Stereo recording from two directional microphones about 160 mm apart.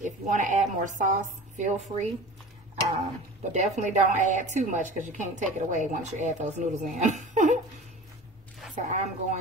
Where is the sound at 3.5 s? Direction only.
50° right (ahead or behind).